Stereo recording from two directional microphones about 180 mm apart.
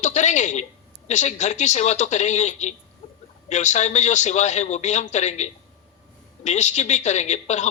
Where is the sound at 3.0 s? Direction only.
35° left (ahead or behind).